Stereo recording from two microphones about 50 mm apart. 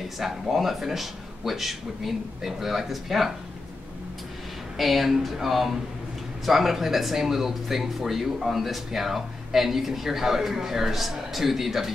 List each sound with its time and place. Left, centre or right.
0.2 s speech: centre
4.7 s speech: centre